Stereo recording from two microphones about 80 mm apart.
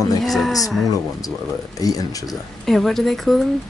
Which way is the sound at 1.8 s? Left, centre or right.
Left.